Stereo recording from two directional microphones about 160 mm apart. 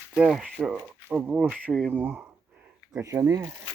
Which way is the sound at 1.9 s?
10° right (ahead or behind).